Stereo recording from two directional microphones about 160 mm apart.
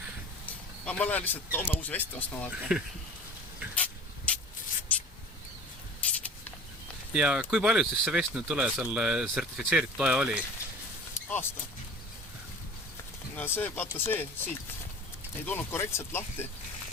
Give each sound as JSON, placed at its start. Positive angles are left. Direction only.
{"t": 0.9, "sound": "speech", "side_deg": 10}
{"t": 2.5, "sound": "speech", "side_deg": -5}
{"t": 3.8, "sound": "a sound", "side_deg": 10}
{"t": 7.1, "sound": "speech", "side_deg": -5}
{"t": 11.1, "sound": "vehicle", "side_deg": 15}
{"t": 13.3, "sound": "speech", "side_deg": 15}